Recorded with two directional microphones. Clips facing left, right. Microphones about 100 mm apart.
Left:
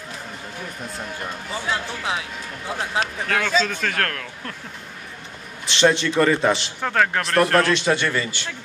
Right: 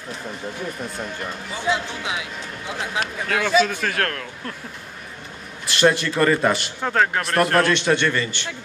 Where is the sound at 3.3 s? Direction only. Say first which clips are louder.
Right 5 dB; 20° right (ahead or behind).